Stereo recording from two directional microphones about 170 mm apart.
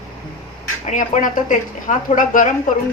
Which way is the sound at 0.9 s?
50° left (ahead or behind).